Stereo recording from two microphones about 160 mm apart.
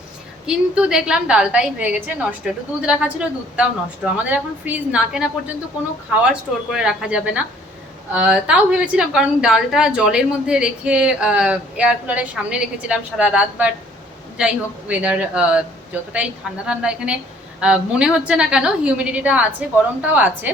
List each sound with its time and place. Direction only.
0.4 s a woman's voice: 5° right (ahead or behind)